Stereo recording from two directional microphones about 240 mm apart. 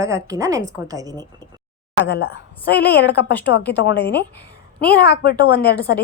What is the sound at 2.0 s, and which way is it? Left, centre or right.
A woman's voice, left.